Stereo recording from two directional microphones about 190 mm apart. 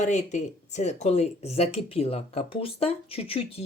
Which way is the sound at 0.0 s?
40° left (ahead or behind).